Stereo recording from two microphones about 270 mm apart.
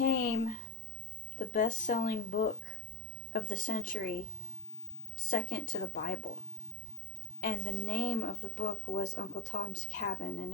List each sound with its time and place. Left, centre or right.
0.0 s a sound: left
1.4 s a woman's voice: left
7.4 s a woman's voice: left